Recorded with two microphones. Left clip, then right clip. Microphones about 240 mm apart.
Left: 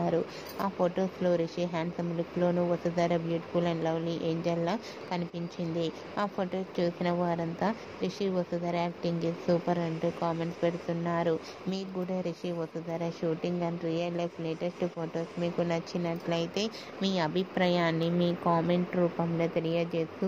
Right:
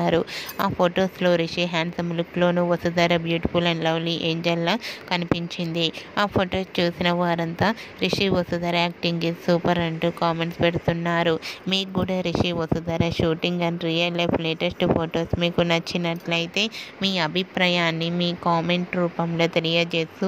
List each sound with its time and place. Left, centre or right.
0.0 s speech: right